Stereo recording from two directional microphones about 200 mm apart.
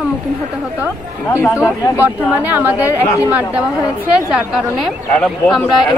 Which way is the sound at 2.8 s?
15° left (ahead or behind).